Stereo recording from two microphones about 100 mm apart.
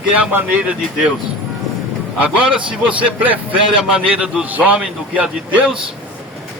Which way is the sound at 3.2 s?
15° right (ahead or behind).